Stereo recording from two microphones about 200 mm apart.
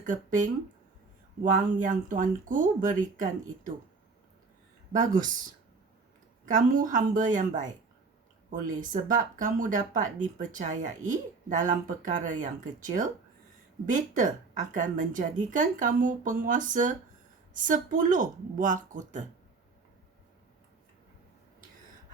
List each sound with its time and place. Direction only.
0.0 s speech: 40° right (ahead or behind)
4.9 s speech: 40° right (ahead or behind)
6.5 s speech: 40° right (ahead or behind)
14.7 s speech: 40° right (ahead or behind)